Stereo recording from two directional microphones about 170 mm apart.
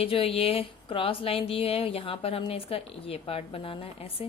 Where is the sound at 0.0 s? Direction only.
35° left (ahead or behind).